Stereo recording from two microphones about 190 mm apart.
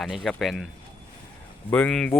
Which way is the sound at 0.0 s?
Centre (ahead or behind).